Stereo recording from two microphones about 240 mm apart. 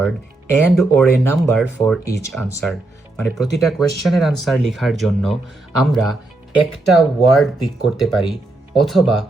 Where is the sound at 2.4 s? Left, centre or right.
Right.